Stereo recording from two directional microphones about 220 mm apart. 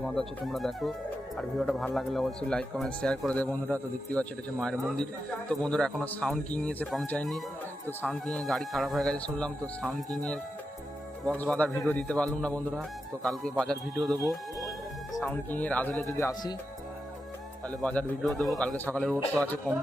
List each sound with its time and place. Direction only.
0.0 s speech: centre (ahead or behind)
11.3 s speech: 5° left (ahead or behind)
17.7 s speech: 5° left (ahead or behind)